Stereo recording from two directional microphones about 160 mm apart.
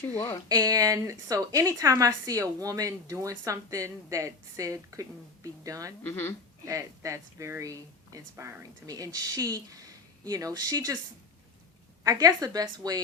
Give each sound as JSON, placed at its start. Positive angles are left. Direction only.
{"t": 0.4, "sound": "a woman's voice", "side_deg": -25}
{"t": 6.0, "sound": "speech", "side_deg": 15}
{"t": 6.7, "sound": "a woman's voice", "side_deg": -20}
{"t": 12.0, "sound": "a woman's voice", "side_deg": -20}